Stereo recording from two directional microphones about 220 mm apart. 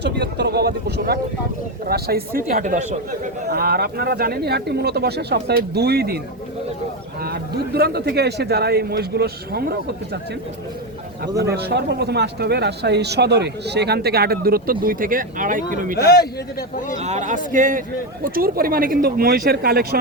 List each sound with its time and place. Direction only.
0.0 s speech: 50° right (ahead or behind)
7.2 s speech: 45° right (ahead or behind)
11.3 s speech: 45° right (ahead or behind)
16.0 s a man's voice: 45° left (ahead or behind)
17.0 s a man's voice: 30° right (ahead or behind)